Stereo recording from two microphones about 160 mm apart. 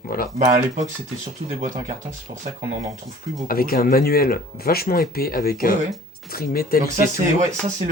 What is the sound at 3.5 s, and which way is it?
Speech, 65° left (ahead or behind).